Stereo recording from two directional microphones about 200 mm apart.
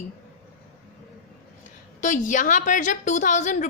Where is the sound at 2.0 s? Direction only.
40° left (ahead or behind).